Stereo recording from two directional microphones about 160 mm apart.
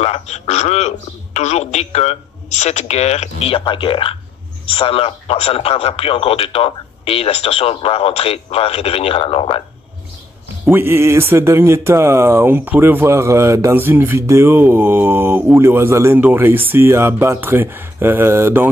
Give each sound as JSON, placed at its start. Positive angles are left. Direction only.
{"t": 0.0, "sound": "a man's voice", "side_deg": 45}
{"t": 10.7, "sound": "speech", "side_deg": -15}